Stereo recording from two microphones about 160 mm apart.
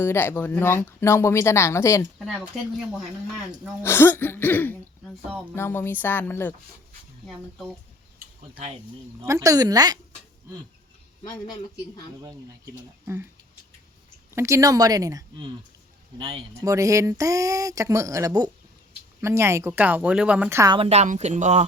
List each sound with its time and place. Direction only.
0.0 s speech: 15° left (ahead or behind)
2.1 s speech: centre (ahead or behind)
3.8 s speech: 15° left (ahead or behind)
5.3 s speech: 10° right (ahead or behind)
5.5 s speech: 15° left (ahead or behind)
7.3 s speech: centre (ahead or behind)
9.2 s speech: 20° right (ahead or behind)
12.2 s speech: 20° right (ahead or behind)
14.3 s speech: 20° right (ahead or behind)
20.7 s speech: 40° right (ahead or behind)